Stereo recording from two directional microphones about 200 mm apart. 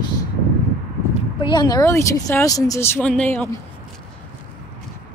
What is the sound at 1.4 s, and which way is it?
Speech, 20° left (ahead or behind).